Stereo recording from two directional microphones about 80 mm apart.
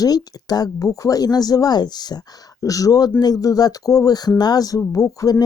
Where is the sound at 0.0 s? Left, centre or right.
Left.